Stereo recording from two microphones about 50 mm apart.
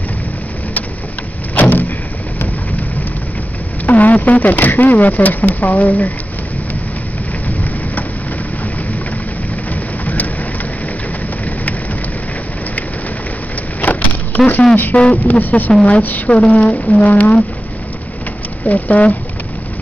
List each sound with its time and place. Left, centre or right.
1.5 s vehicle: left
3.8 s speech: left
10.0 s vehicle: left
13.7 s vehicle: left
14.9 s a woman's voice: left
18.7 s speech: left